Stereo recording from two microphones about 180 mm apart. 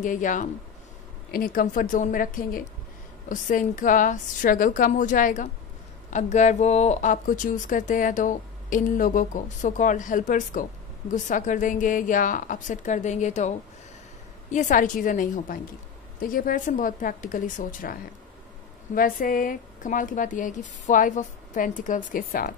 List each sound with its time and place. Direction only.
0.0 s speech: 45° left (ahead or behind)
18.9 s speech: 50° left (ahead or behind)